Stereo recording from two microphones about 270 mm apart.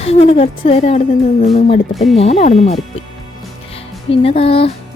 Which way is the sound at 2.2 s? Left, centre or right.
Left.